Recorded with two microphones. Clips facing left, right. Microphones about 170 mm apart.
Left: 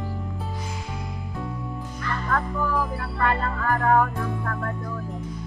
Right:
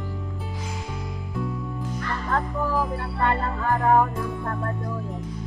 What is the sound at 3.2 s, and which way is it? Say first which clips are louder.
Music: even; 20° right (ahead or behind).